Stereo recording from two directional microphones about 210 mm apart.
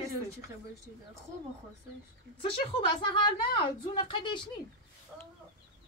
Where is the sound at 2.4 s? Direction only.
25° left (ahead or behind).